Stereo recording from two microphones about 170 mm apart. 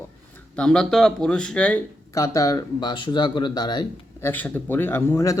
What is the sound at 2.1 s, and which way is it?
Speech, 20° left (ahead or behind).